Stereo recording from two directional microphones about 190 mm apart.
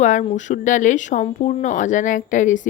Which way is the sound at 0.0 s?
40° left (ahead or behind).